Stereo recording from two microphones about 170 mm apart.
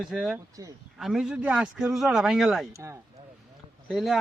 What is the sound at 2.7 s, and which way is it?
Speech, 15° right (ahead or behind).